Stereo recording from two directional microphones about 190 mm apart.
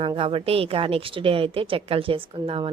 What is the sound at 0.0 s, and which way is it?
A woman's voice, 30° right (ahead or behind).